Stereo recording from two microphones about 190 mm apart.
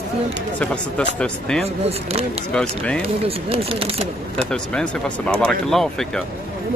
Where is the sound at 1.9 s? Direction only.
30° right (ahead or behind).